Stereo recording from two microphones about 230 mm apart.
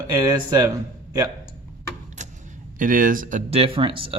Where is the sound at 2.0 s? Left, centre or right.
Right.